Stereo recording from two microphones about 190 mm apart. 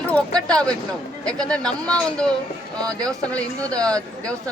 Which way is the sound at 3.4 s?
5° left (ahead or behind).